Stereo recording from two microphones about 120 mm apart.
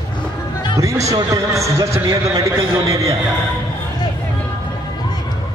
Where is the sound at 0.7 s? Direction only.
25° right (ahead or behind).